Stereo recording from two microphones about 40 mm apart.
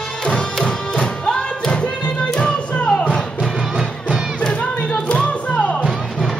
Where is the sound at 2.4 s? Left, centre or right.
Left.